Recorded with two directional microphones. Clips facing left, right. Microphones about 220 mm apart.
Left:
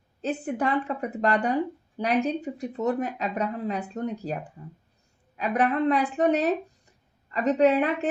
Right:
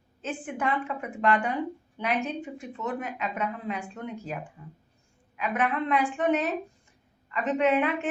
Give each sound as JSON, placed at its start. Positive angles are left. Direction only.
{"t": 0.2, "sound": "speech", "side_deg": 40}